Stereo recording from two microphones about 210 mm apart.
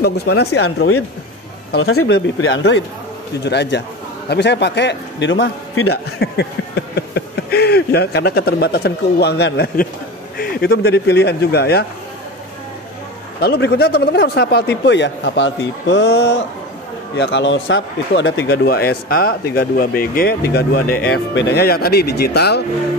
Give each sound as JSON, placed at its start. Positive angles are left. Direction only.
{"t": 0.0, "sound": "speech", "side_deg": 50}
{"t": 1.8, "sound": "speech", "side_deg": 90}
{"t": 2.0, "sound": "a man's voice", "side_deg": 55}
{"t": 6.1, "sound": "a sound", "side_deg": 50}
{"t": 10.3, "sound": "speech", "side_deg": 45}
{"t": 13.4, "sound": "speech", "side_deg": 50}